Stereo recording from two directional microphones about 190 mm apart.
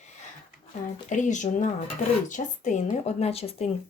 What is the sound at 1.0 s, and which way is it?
Speech, 40° left (ahead or behind).